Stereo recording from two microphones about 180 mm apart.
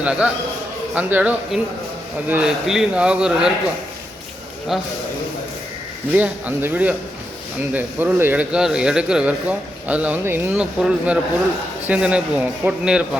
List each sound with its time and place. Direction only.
0.0 s speech: 5° right (ahead or behind)
4.7 s speech: centre (ahead or behind)
6.1 s speech: 10° right (ahead or behind)